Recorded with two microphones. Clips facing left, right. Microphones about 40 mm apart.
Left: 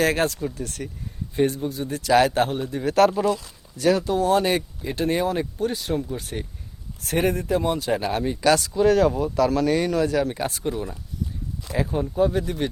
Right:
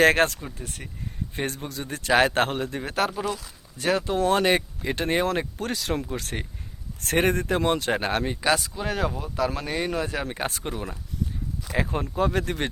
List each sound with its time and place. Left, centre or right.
0.0 s speech: right
0.5 s speech: right
1.4 s speech: right
3.1 s speech: centre
3.8 s speech: right
5.5 s speech: right
8.4 s speech: right
10.3 s speech: right
11.9 s speech: right